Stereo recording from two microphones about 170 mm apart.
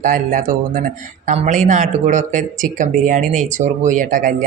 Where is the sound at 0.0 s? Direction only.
50° right (ahead or behind).